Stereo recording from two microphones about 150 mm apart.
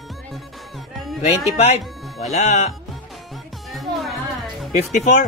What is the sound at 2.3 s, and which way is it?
Speech, 55° left (ahead or behind).